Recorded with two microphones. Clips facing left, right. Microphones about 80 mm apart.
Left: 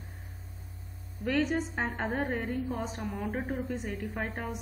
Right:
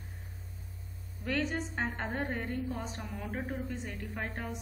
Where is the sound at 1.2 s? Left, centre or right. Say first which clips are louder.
Left 5 dB; centre.